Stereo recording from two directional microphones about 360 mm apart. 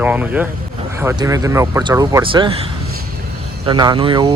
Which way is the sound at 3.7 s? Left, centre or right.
Centre.